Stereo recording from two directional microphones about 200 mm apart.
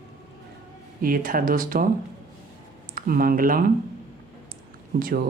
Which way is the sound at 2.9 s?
45° right (ahead or behind).